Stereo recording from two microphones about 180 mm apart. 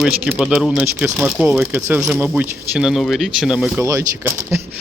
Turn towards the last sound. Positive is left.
turn(degrees=-15)  # may be behind; listen again after turning